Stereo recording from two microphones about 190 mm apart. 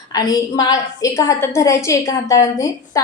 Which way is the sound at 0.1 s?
20° left (ahead or behind).